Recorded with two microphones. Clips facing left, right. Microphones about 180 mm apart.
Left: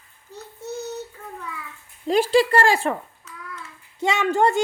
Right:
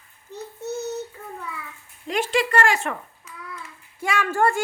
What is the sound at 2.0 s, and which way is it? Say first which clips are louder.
Speech: left 6 dB; 35° left (ahead or behind).